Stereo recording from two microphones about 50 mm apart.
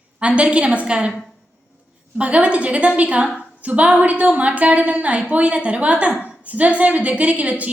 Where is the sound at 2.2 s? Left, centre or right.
Right.